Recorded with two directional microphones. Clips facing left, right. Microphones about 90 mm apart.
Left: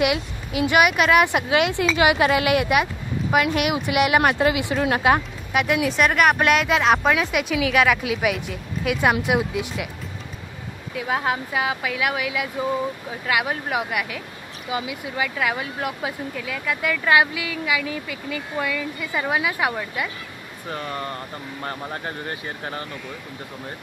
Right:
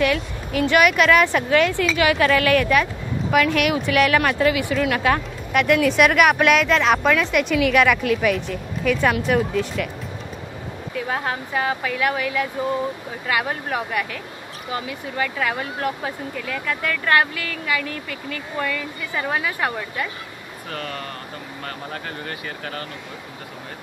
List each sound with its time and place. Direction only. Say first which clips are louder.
0.0 s speech: right 1 dB; 15° left (ahead or behind)
5.5 s a woman's voice: right 4 dB; 5° left (ahead or behind)
11.0 s speech: left 2 dB; 5° left (ahead or behind)
20.7 s speech: left 2 dB; 25° left (ahead or behind)